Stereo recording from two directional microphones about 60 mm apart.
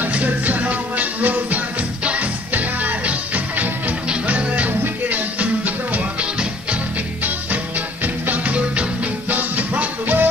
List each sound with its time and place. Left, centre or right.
0.0 s music: right
8.0 s music: right